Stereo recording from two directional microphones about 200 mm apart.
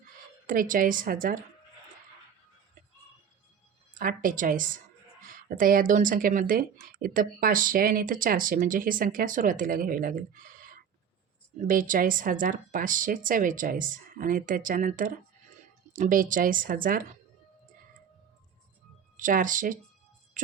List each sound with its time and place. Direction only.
0.4 s speech: 45° right (ahead or behind)
3.9 s speech: 45° right (ahead or behind)
19.1 s speech: 40° right (ahead or behind)
20.4 s music: 40° right (ahead or behind)